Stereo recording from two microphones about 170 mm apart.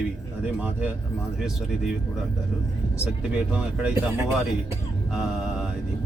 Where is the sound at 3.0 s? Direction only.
5° right (ahead or behind).